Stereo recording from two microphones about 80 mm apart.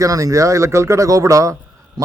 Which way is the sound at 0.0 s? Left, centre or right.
Right.